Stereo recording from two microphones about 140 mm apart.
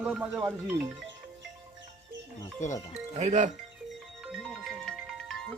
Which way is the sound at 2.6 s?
60° left (ahead or behind).